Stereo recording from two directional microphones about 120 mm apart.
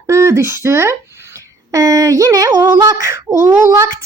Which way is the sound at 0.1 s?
25° right (ahead or behind).